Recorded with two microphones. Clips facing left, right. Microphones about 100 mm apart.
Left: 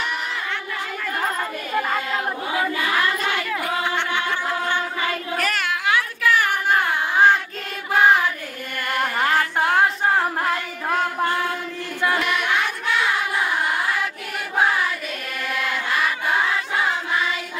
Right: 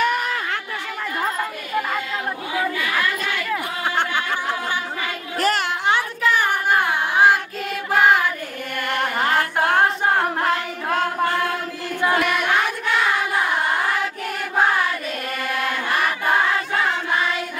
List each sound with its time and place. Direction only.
0.0 s a sound: 50° right (ahead or behind)
3.8 s snicker: 40° right (ahead or behind)
5.4 s child singing: 30° right (ahead or behind)
7.9 s music: centre (ahead or behind)